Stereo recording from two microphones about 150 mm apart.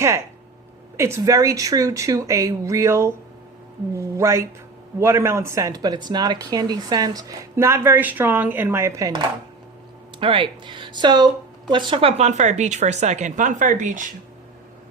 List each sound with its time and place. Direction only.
0.9 s speech: 20° right (ahead or behind)
10.2 s speech: 35° right (ahead or behind); by 14.1 s 55° right (ahead or behind)